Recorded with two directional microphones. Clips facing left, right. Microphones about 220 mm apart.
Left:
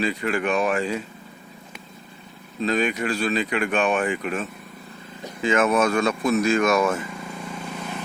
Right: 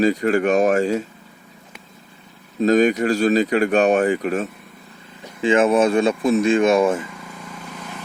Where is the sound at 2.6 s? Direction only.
45° right (ahead or behind).